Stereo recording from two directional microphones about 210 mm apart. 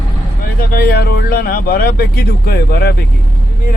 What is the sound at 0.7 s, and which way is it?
Speech, 45° left (ahead or behind).